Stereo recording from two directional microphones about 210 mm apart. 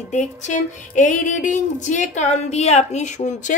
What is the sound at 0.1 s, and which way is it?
Speech, 35° left (ahead or behind).